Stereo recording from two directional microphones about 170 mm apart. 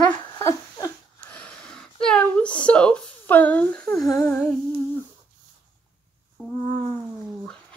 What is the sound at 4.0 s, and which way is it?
Humming, 20° left (ahead or behind).